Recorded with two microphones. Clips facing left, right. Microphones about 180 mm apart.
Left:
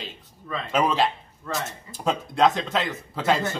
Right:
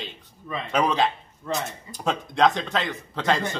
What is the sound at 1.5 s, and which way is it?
Speech, 20° right (ahead or behind).